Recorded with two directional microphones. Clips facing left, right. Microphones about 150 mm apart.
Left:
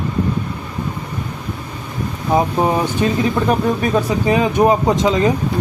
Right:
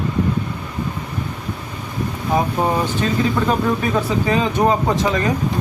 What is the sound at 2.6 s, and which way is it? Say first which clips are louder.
Speech: left 3 dB; 20° left (ahead or behind).